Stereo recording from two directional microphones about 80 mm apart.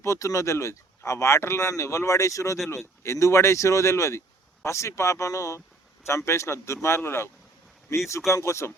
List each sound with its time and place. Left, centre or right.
0.0 s speech: left
8.3 s speech: left